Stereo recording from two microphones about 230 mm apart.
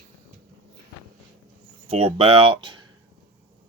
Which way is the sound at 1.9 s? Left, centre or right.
Right.